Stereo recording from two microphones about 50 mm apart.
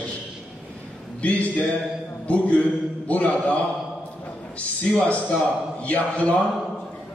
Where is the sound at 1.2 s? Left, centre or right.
Left.